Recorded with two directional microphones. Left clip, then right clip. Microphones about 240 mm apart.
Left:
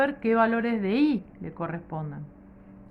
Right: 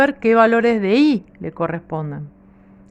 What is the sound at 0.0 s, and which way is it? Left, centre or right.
Speech, right.